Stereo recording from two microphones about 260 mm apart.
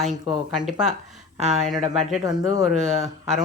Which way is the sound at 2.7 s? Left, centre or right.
Right.